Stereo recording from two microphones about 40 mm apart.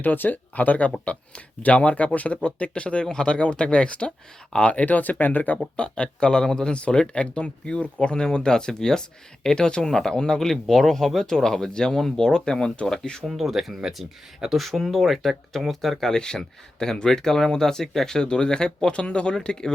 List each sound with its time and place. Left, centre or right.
0.0 s speech: left
5.7 s speech: left
13.2 s speech: centre
16.1 s speech: centre